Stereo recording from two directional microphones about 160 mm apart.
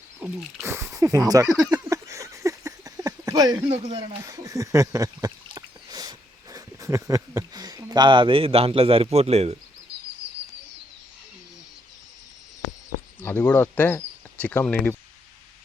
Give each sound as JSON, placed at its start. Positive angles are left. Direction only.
{"t": 0.2, "sound": "speech", "side_deg": -5}
{"t": 0.6, "sound": "a sound", "side_deg": -15}
{"t": 13.2, "sound": "speech", "side_deg": 10}